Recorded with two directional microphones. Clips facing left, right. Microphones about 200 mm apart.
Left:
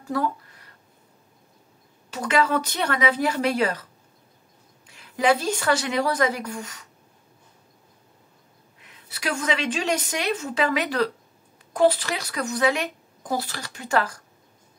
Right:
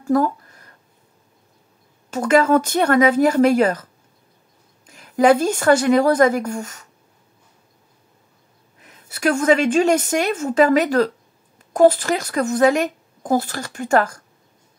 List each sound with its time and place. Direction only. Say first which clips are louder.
0.0 s a sound: right 8 dB; 45° right (ahead or behind)
2.0 s speech: right 7 dB; 45° right (ahead or behind)
4.8 s speech: right 7 dB; 45° right (ahead or behind)
8.8 s speech: right 10 dB; 45° right (ahead or behind)